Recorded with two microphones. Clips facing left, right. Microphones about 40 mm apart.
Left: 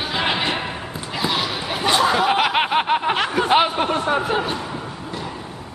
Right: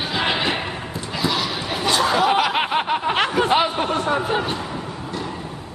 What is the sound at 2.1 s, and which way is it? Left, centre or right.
Snicker, centre.